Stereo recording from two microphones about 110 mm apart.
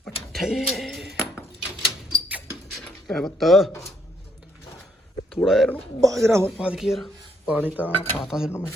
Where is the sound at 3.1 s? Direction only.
5° left (ahead or behind).